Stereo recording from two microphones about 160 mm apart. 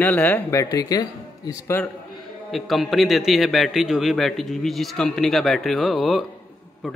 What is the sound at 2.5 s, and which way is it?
Speech, centre (ahead or behind).